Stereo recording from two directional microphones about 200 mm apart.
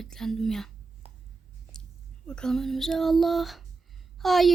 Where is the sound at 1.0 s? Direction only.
30° right (ahead or behind).